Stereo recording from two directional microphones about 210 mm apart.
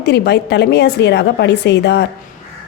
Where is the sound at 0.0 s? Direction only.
55° left (ahead or behind).